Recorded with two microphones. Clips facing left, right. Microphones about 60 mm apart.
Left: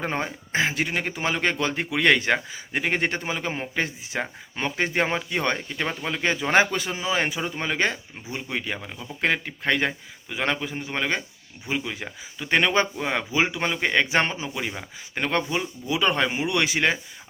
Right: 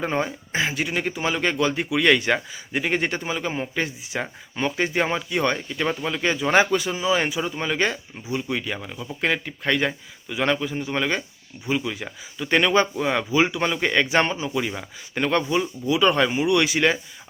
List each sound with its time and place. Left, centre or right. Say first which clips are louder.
0.0 s speech: right 3 dB; left
0.5 s a man's voice: left 1 dB; left